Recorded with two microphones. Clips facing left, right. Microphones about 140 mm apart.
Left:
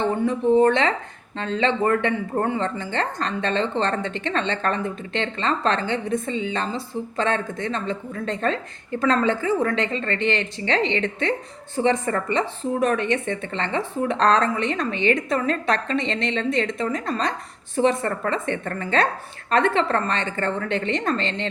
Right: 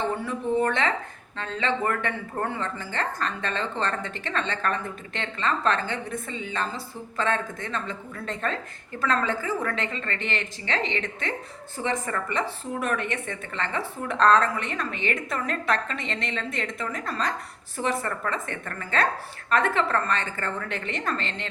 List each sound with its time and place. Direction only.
0.2 s a woman's voice: 20° left (ahead or behind)